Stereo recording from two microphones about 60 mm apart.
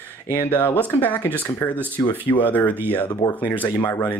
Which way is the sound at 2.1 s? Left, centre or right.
Left.